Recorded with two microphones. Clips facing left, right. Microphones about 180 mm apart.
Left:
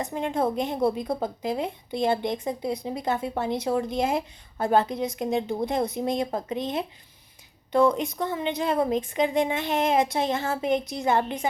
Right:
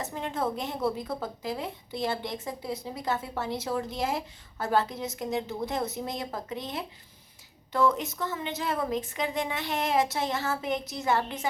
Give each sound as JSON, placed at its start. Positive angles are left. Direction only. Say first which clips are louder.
{"t": 0.0, "sound": "a woman's voice", "louder": "left 5 dB", "side_deg": 15}
{"t": 7.9, "sound": "a woman's voice", "louder": "left 5 dB", "side_deg": 20}